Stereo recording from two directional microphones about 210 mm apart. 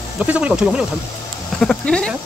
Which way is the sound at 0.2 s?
5° right (ahead or behind).